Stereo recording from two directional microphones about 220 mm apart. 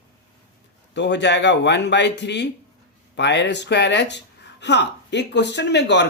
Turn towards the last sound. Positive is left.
turn(degrees=50)  # may be behind; listen again after turning